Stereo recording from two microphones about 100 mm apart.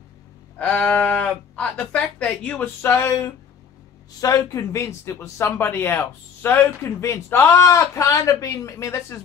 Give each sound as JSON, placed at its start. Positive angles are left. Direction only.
{"t": 0.6, "sound": "speech", "side_deg": 10}
{"t": 2.8, "sound": "a man's voice", "side_deg": 25}